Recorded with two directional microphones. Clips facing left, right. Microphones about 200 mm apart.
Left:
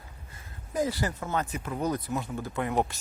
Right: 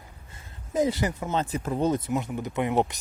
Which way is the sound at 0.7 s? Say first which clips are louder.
Right 4 dB; 20° right (ahead or behind).